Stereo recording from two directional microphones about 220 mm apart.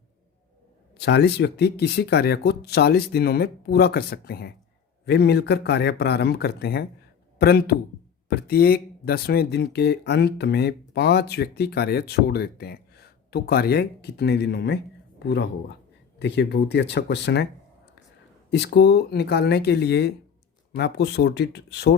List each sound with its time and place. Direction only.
0.9 s speech: 50° left (ahead or behind)
18.5 s speech: 50° left (ahead or behind)